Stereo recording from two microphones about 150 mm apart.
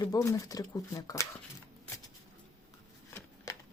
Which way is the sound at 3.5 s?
25° left (ahead or behind).